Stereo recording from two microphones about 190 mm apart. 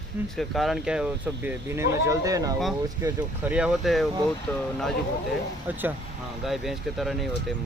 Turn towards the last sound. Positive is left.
turn(degrees=0)  # may be behind; listen again after turning